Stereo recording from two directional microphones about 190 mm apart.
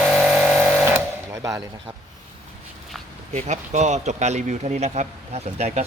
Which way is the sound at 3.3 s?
40° right (ahead or behind).